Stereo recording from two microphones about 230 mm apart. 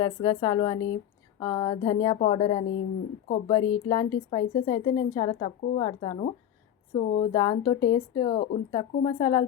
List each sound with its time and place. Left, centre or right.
0.0 s a woman's voice: centre